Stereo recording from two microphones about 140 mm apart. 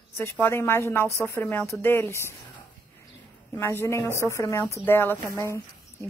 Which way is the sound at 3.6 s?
15° left (ahead or behind).